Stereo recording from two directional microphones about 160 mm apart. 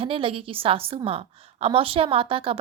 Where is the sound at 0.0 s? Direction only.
35° right (ahead or behind).